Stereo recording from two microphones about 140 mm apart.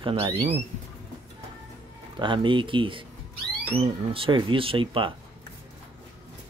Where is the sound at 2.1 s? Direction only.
35° right (ahead or behind).